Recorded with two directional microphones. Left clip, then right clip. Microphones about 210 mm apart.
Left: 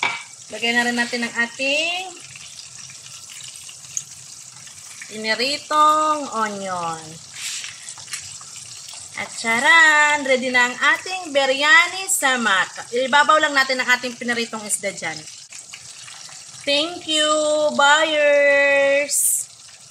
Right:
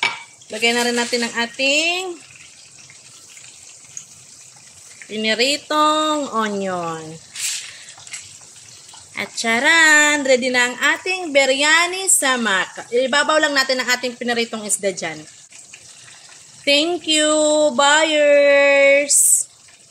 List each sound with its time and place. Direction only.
0.6 s speech: 55° right (ahead or behind)
5.2 s speech: 45° right (ahead or behind)
9.1 s a woman's voice: 50° right (ahead or behind)
16.6 s a woman's voice: 40° right (ahead or behind)